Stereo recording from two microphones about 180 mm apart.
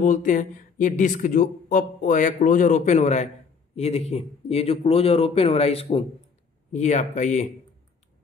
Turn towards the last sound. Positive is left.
turn(degrees=40)  # may be behind; listen again after turning